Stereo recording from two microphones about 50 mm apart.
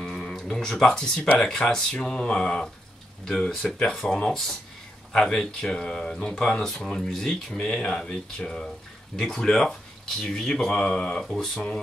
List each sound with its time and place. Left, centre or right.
0.0 s speech: centre
3.3 s speech: centre